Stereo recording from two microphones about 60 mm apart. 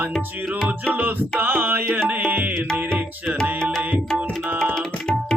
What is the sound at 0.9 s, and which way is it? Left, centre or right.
Music, right.